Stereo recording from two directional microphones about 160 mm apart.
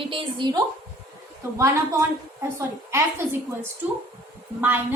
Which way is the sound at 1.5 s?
15° right (ahead or behind).